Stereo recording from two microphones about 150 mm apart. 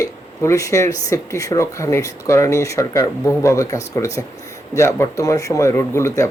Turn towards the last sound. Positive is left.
turn(degrees=20)  # may be behind; listen again after turning